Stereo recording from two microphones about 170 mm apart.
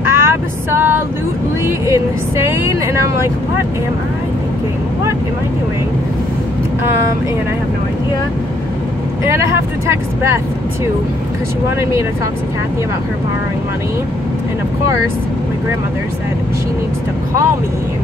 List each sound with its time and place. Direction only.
0.1 s vehicle: 15° right (ahead or behind)
1.9 s speech: 15° right (ahead or behind)
9.8 s speech: 15° right (ahead or behind)